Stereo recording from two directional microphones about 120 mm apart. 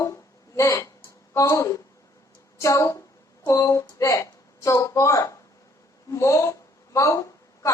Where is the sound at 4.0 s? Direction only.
25° left (ahead or behind).